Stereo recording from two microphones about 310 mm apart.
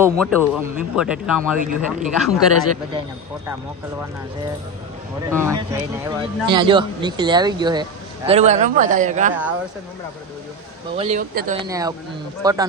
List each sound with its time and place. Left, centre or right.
0.0 s speech: centre
1.5 s a man's voice: right
2.1 s speech: centre
5.3 s a man's voice: centre
10.9 s a man's voice: right
11.6 s speech: centre